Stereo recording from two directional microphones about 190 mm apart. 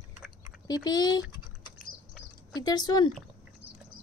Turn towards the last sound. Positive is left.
turn(degrees=20)  # may be behind; listen again after turning